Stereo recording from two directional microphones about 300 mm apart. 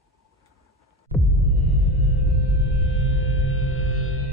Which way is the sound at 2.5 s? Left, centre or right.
Left.